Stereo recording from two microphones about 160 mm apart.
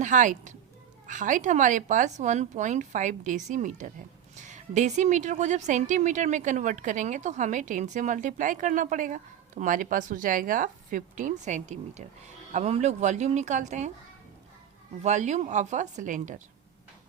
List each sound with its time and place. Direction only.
0.0 s a woman's voice: 50° right (ahead or behind)
15.0 s a woman's voice: 45° right (ahead or behind)